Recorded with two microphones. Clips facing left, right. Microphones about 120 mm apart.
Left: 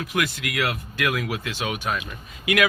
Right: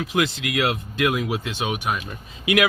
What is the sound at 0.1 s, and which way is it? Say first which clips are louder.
Speech: right 3 dB; 25° right (ahead or behind).